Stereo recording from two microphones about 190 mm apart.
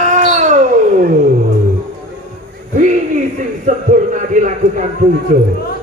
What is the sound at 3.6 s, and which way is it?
Speech, 40° right (ahead or behind).